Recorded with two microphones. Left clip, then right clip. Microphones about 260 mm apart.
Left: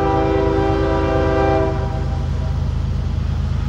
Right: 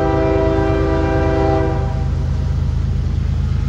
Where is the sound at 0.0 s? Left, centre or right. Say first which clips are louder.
Right 1 dB; centre.